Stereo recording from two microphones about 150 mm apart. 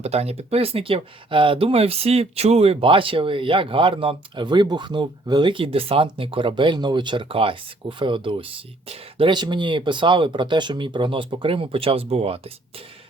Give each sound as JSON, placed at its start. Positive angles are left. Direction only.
{"t": 0.0, "sound": "speech", "side_deg": -45}